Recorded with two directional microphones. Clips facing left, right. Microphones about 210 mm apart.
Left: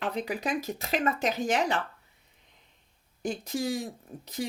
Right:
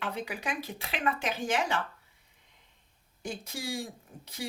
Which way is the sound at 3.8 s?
40° left (ahead or behind).